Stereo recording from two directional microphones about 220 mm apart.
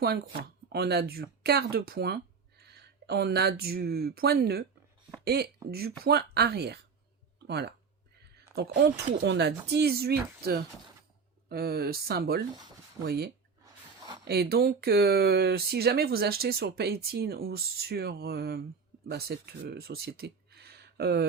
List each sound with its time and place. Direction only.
0.7 s speech: 45° right (ahead or behind)